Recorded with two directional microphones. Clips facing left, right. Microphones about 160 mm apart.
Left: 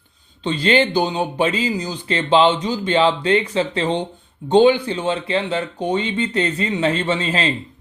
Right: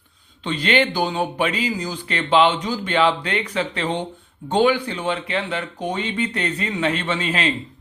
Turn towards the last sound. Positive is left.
turn(degrees=30)  # may be behind; listen again after turning